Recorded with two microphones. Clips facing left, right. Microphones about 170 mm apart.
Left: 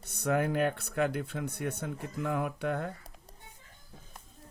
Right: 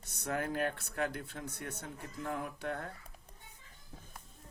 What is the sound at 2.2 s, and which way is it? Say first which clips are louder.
Speech: left 6 dB; 80° left.